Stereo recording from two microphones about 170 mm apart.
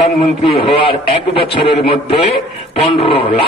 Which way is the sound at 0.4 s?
35° left (ahead or behind).